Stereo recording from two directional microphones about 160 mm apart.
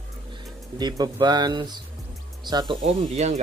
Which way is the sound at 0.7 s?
25° right (ahead or behind).